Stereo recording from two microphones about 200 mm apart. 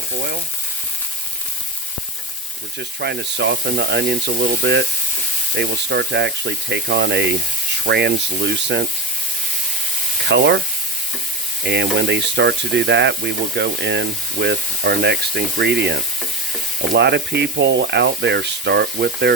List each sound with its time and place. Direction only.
2.7 s speech: 60° right (ahead or behind)
10.2 s speech: 60° right (ahead or behind)
11.6 s speech: 60° right (ahead or behind)